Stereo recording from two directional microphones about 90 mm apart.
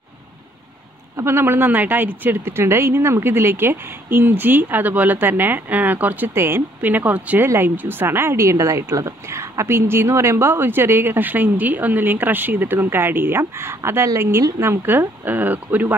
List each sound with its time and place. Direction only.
1.1 s speech: 30° right (ahead or behind)